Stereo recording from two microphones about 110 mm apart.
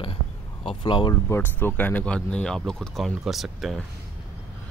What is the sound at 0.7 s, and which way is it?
Speech, 45° left (ahead or behind).